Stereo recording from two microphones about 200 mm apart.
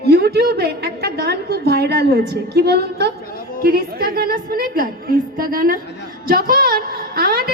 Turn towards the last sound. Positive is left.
turn(degrees=-50)  # may be behind; listen again after turning